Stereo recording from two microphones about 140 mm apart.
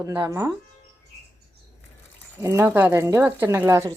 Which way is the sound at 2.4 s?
20° right (ahead or behind).